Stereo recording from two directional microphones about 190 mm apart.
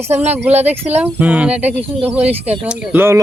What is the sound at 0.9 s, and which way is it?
Speech, 10° right (ahead or behind).